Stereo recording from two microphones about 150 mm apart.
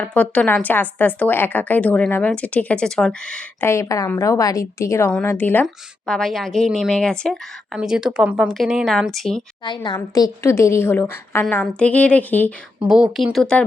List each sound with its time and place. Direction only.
0.0 s a woman's voice: 10° left (ahead or behind)
3.7 s a woman's voice: 20° left (ahead or behind)
5.6 s speech: 5° left (ahead or behind)
9.6 s a woman's voice: 30° left (ahead or behind); by 12.5 s 10° left (ahead or behind)
12.8 s speech: 5° right (ahead or behind)